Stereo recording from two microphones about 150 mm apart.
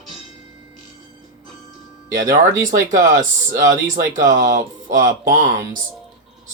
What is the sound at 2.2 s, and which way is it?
Speech, 60° right (ahead or behind).